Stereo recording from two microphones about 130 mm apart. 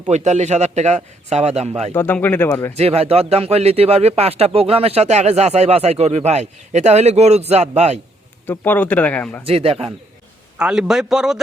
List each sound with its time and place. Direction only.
0.1 s speech: 60° right (ahead or behind)
1.9 s speech: 15° left (ahead or behind)
2.7 s speech: 55° right (ahead or behind)
8.4 s speech: 15° left (ahead or behind)
9.5 s a man's voice: 50° right (ahead or behind)
10.6 s a man's voice: 5° right (ahead or behind)